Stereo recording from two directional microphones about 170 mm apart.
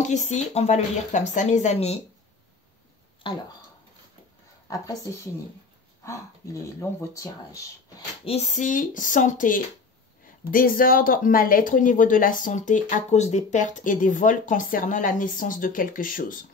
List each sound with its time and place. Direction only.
0.1 s speech: 45° left (ahead or behind)
3.3 s speech: 30° left (ahead or behind)
4.6 s a woman's voice: 20° left (ahead or behind)
8.3 s speech: 45° left (ahead or behind)